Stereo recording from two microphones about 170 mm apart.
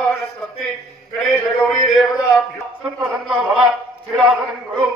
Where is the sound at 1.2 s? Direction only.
Centre (ahead or behind).